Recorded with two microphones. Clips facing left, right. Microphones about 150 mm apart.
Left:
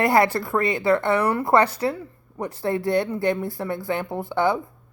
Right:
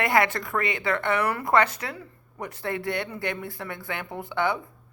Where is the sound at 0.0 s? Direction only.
35° left (ahead or behind).